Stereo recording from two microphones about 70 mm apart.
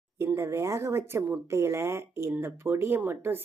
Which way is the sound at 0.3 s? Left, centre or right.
Right.